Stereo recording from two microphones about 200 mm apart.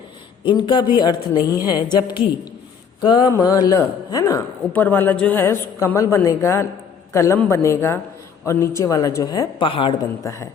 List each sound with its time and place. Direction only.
0.4 s a woman's voice: 25° left (ahead or behind)